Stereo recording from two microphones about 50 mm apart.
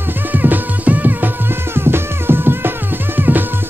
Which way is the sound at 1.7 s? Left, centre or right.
Right.